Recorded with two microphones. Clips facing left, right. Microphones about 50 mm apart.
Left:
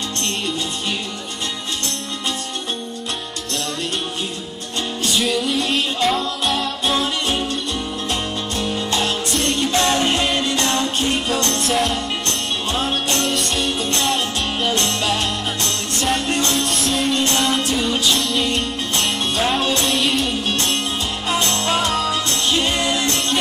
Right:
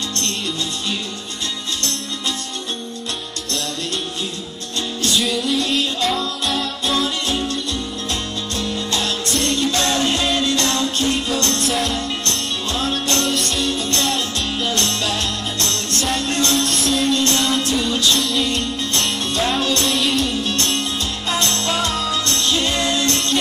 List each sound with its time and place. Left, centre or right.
5.2 s music: centre
7.0 s music: left
9.3 s music: centre
9.7 s music: centre
11.5 s music: centre
12.7 s music: centre
13.2 s music: centre
13.7 s music: centre
15.7 s music: centre
16.3 s music: centre
16.5 s music: centre
19.8 s music: centre
21.3 s music: centre